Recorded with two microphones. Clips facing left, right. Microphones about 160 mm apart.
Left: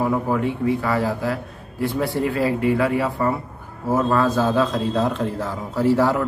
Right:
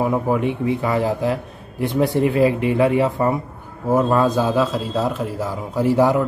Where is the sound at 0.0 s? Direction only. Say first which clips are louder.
Right 2 dB; 20° right (ahead or behind).